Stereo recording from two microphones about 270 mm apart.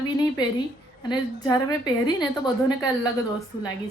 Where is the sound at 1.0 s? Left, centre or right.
Centre.